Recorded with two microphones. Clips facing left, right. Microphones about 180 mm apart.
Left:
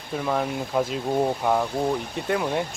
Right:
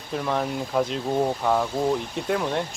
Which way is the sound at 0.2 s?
Centre (ahead or behind).